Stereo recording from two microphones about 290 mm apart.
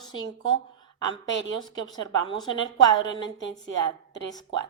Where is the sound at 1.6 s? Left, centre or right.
Centre.